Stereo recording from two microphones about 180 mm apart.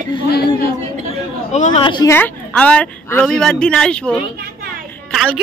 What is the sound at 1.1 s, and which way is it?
Chatter, 40° left (ahead or behind).